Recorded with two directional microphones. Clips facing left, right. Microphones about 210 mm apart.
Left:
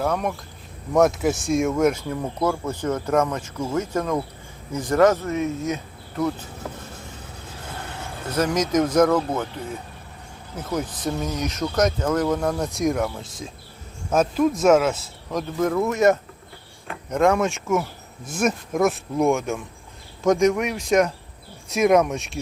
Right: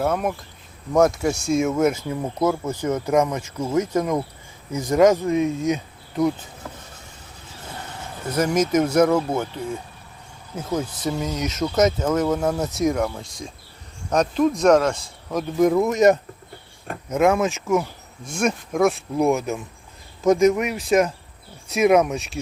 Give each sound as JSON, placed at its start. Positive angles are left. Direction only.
{"t": 0.0, "sound": "speech", "side_deg": -5}
{"t": 8.3, "sound": "speech", "side_deg": -10}
{"t": 11.0, "sound": "speech", "side_deg": -10}
{"t": 15.5, "sound": "speech", "side_deg": -15}
{"t": 17.1, "sound": "speech", "side_deg": -5}